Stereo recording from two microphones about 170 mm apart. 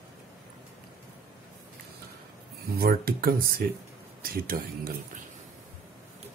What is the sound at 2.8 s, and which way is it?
A man's voice, 60° right (ahead or behind).